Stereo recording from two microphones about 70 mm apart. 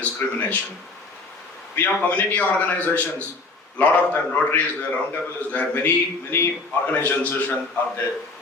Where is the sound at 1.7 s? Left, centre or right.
Left.